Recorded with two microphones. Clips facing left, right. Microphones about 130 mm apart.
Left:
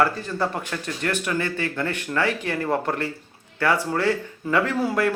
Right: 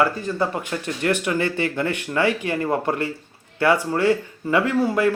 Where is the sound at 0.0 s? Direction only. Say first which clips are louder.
Right 1 dB; 5° right (ahead or behind).